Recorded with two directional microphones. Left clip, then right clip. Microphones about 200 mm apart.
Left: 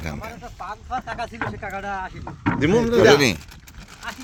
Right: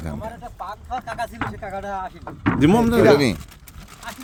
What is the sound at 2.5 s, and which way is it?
Speech, 65° right (ahead or behind).